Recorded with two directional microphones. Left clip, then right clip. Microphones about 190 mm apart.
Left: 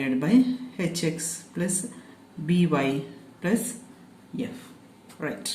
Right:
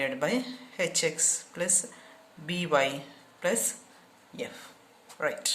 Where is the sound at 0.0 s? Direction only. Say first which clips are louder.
Left 5 dB; 30° right (ahead or behind).